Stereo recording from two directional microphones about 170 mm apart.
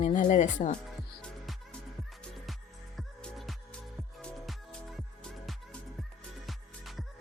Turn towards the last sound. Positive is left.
turn(degrees=0)  # may be behind; listen again after turning